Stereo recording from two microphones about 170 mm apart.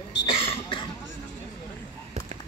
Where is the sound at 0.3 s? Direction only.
35° left (ahead or behind).